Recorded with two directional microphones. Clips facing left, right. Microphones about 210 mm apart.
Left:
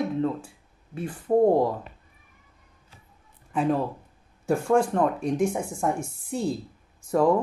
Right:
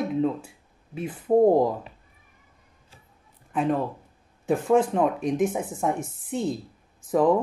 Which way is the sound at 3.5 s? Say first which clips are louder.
Even; centre (ahead or behind).